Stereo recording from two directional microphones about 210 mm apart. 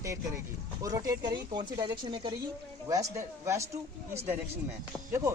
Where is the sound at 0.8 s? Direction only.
15° right (ahead or behind).